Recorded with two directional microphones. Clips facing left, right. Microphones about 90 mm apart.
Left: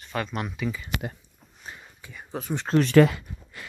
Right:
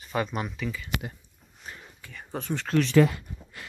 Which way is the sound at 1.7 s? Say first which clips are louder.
Left 1 dB; 15° left (ahead or behind).